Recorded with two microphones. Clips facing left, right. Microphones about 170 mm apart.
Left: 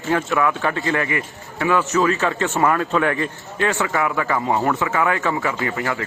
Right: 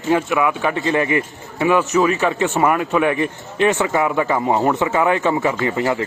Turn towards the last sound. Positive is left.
turn(degrees=-20)  # may be behind; listen again after turning